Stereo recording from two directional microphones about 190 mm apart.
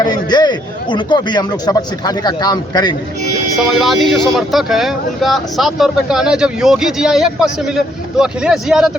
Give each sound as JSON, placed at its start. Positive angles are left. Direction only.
{"t": 0.0, "sound": "a man's voice", "side_deg": 20}
{"t": 3.6, "sound": "speech", "side_deg": 0}